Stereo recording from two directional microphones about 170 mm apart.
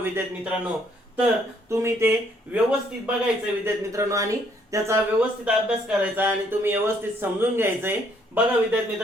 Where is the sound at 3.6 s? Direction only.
15° right (ahead or behind).